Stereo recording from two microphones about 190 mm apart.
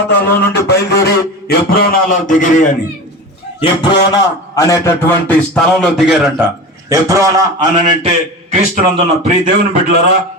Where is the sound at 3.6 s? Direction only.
25° left (ahead or behind); by 6.4 s centre (ahead or behind).